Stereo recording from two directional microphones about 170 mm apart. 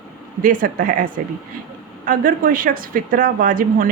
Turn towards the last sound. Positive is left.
turn(degrees=-55)  # may be behind; listen again after turning